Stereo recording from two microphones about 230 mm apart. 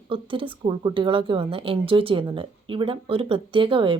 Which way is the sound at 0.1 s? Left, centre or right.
Right.